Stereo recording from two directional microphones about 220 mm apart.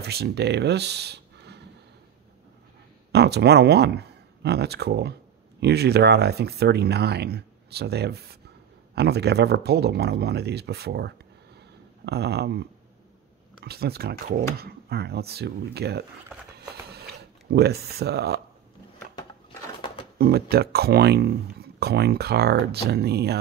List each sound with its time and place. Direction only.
0.0 s speech: 50° right (ahead or behind)
3.1 s speech: 50° right (ahead or behind)
16.8 s a sound: 45° right (ahead or behind)
19.1 s bird: 20° left (ahead or behind)
20.2 s speech: 45° right (ahead or behind)